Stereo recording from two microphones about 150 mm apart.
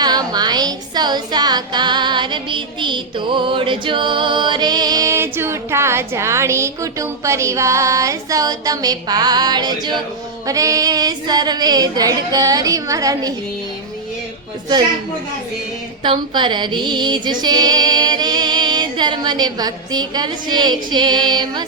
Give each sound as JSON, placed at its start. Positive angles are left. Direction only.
{"t": 0.0, "sound": "a woman's voice", "side_deg": -30}
{"t": 16.0, "sound": "a woman's voice", "side_deg": -30}